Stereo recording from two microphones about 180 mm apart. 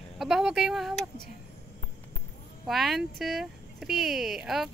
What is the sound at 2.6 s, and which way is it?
Speech, centre (ahead or behind).